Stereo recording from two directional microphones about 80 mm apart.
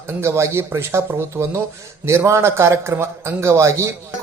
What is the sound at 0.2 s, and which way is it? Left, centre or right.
A man's voice, right.